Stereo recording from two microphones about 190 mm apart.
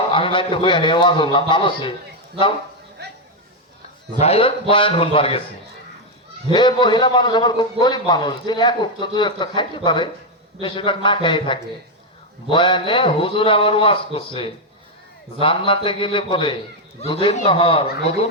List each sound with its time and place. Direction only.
0.1 s a man's voice: 25° left (ahead or behind)
3.0 s a sound: 60° right (ahead or behind)
4.2 s a man's voice: 30° left (ahead or behind)
6.5 s a man's voice: 25° left (ahead or behind)